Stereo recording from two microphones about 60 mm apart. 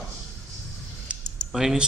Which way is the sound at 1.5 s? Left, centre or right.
Centre.